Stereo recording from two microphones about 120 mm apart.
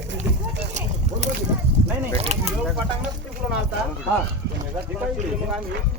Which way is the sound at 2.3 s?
65° right (ahead or behind).